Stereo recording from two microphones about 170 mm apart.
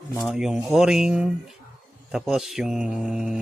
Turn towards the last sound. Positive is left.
turn(degrees=-5)  # may be behind; listen again after turning